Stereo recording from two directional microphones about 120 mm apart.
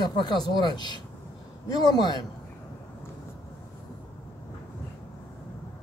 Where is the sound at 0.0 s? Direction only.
35° left (ahead or behind).